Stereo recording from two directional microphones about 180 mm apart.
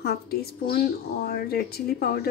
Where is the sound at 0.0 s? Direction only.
60° left (ahead or behind).